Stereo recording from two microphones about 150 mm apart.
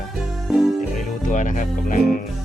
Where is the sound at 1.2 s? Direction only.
60° left (ahead or behind).